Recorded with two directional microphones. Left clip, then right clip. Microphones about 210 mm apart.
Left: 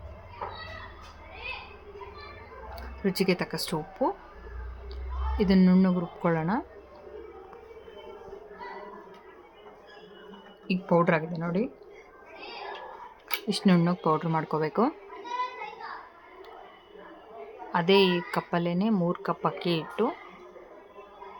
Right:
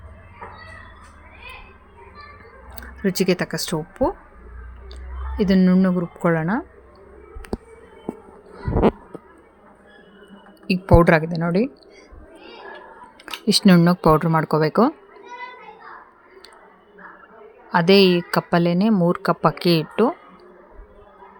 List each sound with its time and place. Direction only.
3.0 s speech: 20° right (ahead or behind)
5.4 s a woman's voice: 15° right (ahead or behind)
10.7 s speech: 35° right (ahead or behind)
13.5 s speech: 30° right (ahead or behind)
17.7 s speech: 35° right (ahead or behind)